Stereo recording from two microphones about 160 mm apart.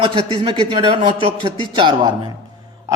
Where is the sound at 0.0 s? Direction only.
35° right (ahead or behind).